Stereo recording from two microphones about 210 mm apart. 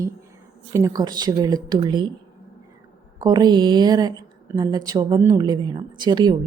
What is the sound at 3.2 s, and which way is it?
A woman's voice, 20° right (ahead or behind).